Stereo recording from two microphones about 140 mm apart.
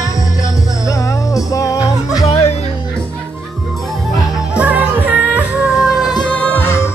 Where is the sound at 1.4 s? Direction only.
25° left (ahead or behind).